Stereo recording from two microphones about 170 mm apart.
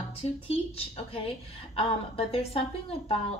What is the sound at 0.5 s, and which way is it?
A woman's voice, 35° left (ahead or behind).